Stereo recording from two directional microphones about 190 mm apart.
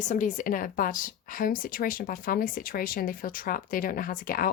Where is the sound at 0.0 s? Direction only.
40° left (ahead or behind).